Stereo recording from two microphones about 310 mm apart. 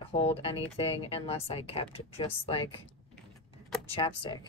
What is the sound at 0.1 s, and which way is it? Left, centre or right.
Speech, centre.